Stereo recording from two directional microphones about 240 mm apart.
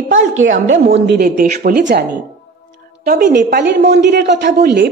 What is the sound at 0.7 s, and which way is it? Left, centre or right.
A woman's voice, right.